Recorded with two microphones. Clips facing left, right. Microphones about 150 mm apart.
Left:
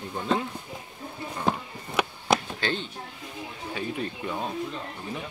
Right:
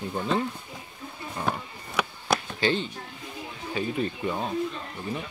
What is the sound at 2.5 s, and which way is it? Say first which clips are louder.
Speech: right 4 dB; 10° right (ahead or behind).